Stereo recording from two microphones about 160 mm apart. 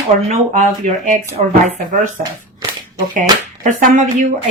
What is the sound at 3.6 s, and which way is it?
Speech, 50° right (ahead or behind).